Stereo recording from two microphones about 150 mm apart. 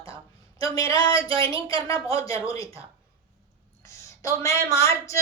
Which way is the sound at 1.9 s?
20° left (ahead or behind).